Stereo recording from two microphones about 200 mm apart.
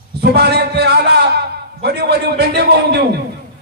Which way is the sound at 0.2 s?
55° right (ahead or behind).